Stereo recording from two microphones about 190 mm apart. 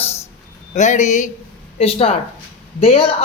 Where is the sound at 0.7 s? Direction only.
40° left (ahead or behind).